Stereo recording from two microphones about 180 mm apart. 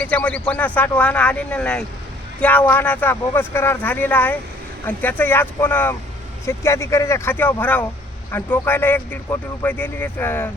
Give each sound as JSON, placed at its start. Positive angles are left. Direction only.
{"t": 0.0, "sound": "speech", "side_deg": 10}